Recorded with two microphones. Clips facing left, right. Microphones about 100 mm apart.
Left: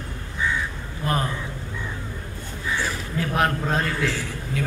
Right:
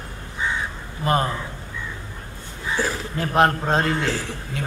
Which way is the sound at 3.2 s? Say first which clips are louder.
Right 5 dB; 30° right (ahead or behind).